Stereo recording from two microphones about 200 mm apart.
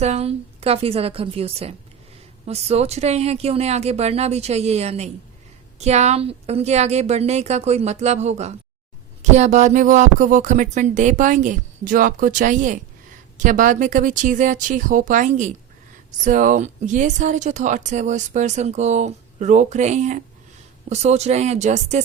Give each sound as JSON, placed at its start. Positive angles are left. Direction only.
{"t": 0.0, "sound": "a woman's voice", "side_deg": -35}